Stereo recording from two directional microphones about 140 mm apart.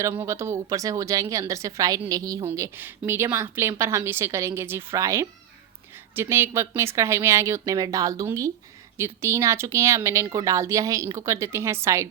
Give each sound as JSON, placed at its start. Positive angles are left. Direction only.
{"t": 0.0, "sound": "a woman's voice", "side_deg": -20}
{"t": 2.5, "sound": "a woman's voice", "side_deg": -15}